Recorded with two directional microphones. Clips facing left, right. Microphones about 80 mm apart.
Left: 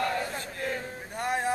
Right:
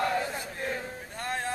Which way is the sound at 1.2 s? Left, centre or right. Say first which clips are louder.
Left 5 dB; centre.